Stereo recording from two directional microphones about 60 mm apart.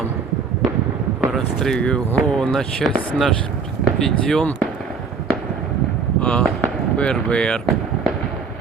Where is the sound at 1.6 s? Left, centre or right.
Centre.